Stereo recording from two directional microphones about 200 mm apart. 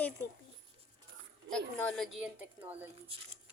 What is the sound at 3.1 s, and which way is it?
Speech, 30° right (ahead or behind).